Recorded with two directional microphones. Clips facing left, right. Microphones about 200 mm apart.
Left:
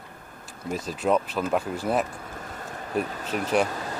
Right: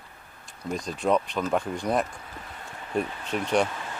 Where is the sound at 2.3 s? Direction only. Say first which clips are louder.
Left 4 dB; 45° left (ahead or behind).